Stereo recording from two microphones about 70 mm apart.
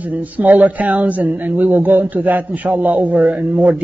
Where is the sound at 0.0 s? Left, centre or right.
Right.